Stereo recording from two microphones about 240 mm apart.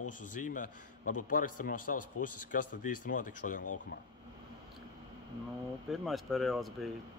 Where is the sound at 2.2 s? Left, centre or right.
Left.